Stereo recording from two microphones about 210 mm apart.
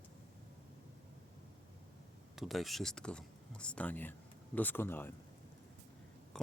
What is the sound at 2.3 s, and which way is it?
Speech, centre (ahead or behind).